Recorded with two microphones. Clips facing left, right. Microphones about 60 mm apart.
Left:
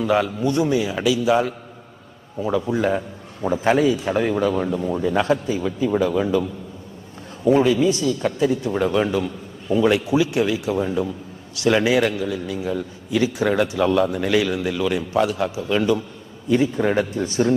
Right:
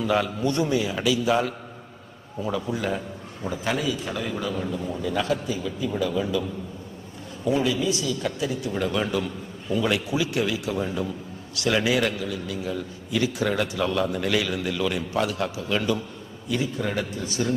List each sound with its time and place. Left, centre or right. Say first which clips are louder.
0.0 s a man's voice: left 4 dB; centre
2.4 s a man's voice: left 6 dB; left
4.9 s a man's voice: left 6 dB; left
7.4 s a man's voice: left 7 dB; left; by 16.0 s centre
16.5 s a man's voice: left 8 dB; left